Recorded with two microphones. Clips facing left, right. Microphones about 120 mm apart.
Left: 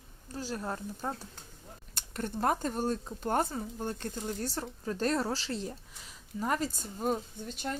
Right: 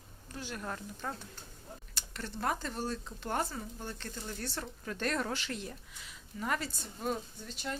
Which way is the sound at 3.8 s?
45° left (ahead or behind).